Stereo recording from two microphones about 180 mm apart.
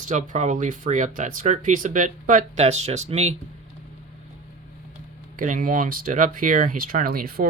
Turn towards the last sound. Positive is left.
turn(degrees=-55)  # may be behind; listen again after turning